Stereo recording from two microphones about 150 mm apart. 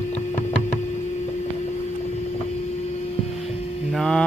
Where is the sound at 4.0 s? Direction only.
5° left (ahead or behind).